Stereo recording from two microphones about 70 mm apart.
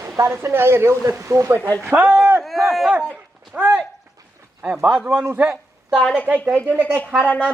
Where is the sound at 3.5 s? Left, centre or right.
Right.